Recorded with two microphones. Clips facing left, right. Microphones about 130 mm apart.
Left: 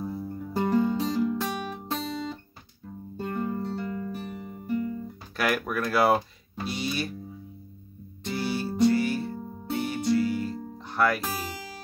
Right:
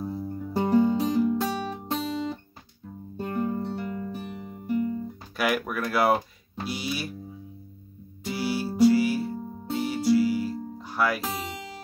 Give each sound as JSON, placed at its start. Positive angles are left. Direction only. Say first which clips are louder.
{"t": 0.1, "sound": "music", "louder": "right 2 dB", "side_deg": -25}
{"t": 3.4, "sound": "music", "louder": "right 1 dB", "side_deg": -15}
{"t": 4.5, "sound": "guitar", "louder": "right 3 dB", "side_deg": -20}
{"t": 5.4, "sound": "speech", "louder": "even", "side_deg": 0}
{"t": 8.2, "sound": "music", "louder": "right 1 dB", "side_deg": -5}